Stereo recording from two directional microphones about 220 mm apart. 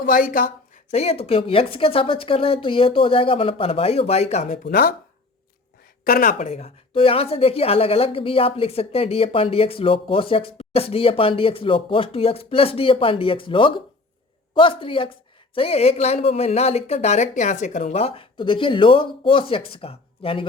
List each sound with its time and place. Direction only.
0.0 s a woman's voice: 40° left (ahead or behind)
4.6 s speech: 40° left (ahead or behind)
6.1 s a woman's voice: 40° left (ahead or behind)